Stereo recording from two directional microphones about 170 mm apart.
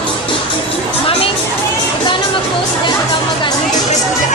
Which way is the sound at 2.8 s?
25° left (ahead or behind).